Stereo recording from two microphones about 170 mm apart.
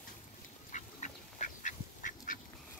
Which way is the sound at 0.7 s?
45° left (ahead or behind).